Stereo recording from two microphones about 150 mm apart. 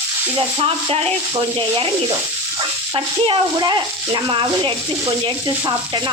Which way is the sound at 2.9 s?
30° right (ahead or behind).